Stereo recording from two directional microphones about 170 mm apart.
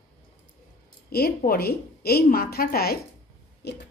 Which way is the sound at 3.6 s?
75° left (ahead or behind).